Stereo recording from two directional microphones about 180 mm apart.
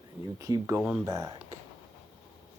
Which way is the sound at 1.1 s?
20° right (ahead or behind).